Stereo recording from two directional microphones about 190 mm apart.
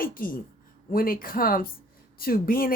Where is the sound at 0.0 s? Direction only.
50° left (ahead or behind).